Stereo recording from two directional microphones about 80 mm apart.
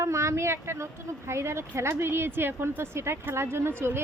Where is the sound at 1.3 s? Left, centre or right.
Right.